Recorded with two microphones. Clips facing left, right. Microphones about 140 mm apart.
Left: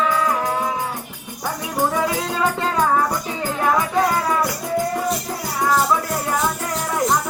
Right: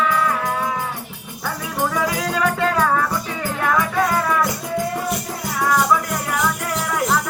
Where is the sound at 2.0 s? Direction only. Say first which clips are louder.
Even; 30° left (ahead or behind).